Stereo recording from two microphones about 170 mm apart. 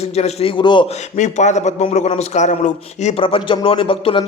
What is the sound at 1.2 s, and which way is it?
A man's voice, 45° left (ahead or behind).